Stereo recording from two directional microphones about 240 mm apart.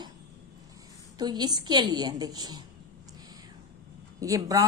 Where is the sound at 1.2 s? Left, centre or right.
Centre.